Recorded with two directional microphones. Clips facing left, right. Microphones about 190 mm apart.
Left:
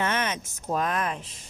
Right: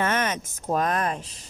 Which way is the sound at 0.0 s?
45° right (ahead or behind).